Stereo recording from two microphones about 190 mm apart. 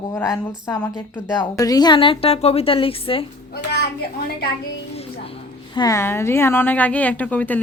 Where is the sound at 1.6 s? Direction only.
20° left (ahead or behind).